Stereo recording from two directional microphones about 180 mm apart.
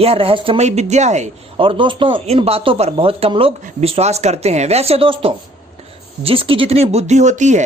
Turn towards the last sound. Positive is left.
turn(degrees=-40)  # may be behind; listen again after turning